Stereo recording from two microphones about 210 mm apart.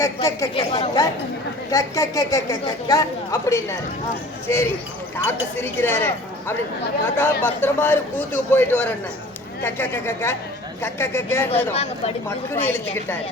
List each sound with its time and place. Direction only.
0.0 s a man's voice: 15° left (ahead or behind)
7.4 s a man's voice: 10° left (ahead or behind)
11.7 s speech: 30° left (ahead or behind)
12.5 s a man's voice: 10° left (ahead or behind)